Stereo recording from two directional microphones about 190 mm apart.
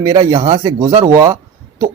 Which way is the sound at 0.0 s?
20° right (ahead or behind).